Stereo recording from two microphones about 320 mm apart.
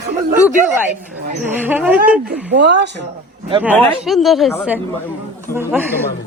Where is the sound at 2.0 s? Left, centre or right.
Right.